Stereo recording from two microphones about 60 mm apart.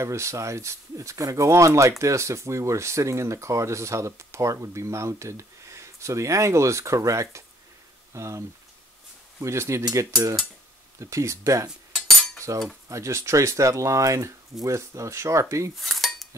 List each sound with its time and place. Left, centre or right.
0.0 s speech: right
12.4 s cutlery: right
12.9 s speech: right
15.7 s cutlery: centre